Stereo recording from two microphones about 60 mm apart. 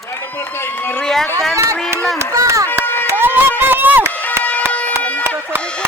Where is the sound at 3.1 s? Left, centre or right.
Right.